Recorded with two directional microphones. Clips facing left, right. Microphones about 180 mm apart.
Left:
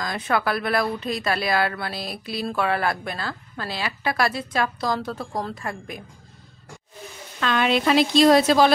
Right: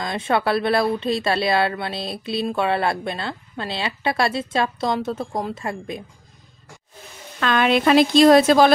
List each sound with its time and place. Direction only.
0.0 s speech: 25° right (ahead or behind)
7.3 s speech: 55° right (ahead or behind)